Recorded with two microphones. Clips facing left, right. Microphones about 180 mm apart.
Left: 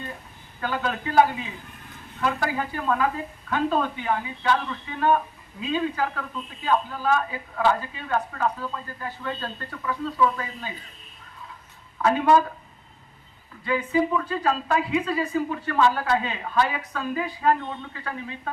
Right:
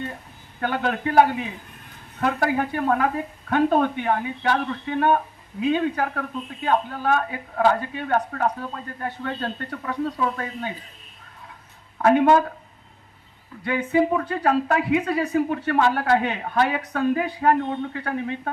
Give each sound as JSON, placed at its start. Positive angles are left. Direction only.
{"t": 0.6, "sound": "a man's voice", "side_deg": -55}
{"t": 12.0, "sound": "a man's voice", "side_deg": -55}
{"t": 13.7, "sound": "a man's voice", "side_deg": -60}